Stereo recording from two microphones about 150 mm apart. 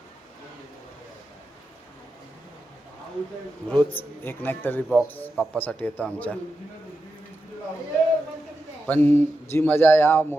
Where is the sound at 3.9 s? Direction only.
15° left (ahead or behind).